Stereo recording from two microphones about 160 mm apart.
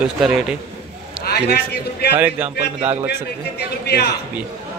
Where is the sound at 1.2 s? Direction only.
90° left.